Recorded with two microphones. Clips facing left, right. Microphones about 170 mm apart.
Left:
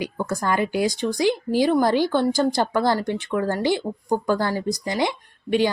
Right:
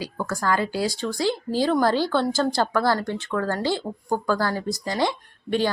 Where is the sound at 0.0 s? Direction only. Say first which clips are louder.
Left 2 dB; 20° left (ahead or behind).